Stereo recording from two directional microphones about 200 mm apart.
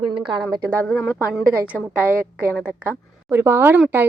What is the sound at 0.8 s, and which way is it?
Speech, 5° left (ahead or behind).